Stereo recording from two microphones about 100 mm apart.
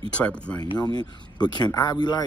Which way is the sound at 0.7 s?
45° left (ahead or behind).